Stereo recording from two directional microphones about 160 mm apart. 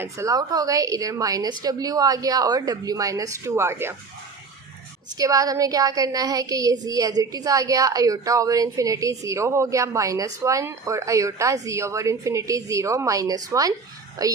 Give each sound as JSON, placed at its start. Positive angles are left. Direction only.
{"t": 0.0, "sound": "a woman's voice", "side_deg": -20}
{"t": 5.1, "sound": "a woman's voice", "side_deg": -20}